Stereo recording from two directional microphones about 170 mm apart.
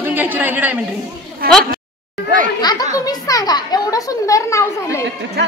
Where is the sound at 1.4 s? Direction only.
60° right (ahead or behind).